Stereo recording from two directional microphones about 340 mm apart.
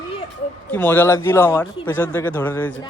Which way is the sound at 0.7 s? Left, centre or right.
Centre.